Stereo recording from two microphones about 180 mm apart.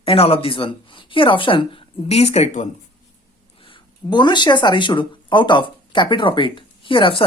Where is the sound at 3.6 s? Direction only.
25° left (ahead or behind).